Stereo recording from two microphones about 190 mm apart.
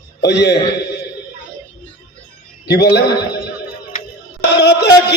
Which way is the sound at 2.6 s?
60° left (ahead or behind).